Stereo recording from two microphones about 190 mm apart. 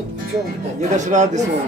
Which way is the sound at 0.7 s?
40° right (ahead or behind).